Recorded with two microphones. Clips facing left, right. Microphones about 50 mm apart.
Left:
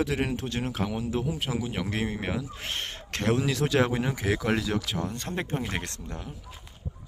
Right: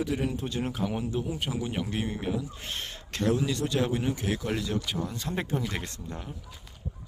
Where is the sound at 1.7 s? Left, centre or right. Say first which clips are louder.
Left 1 dB; left.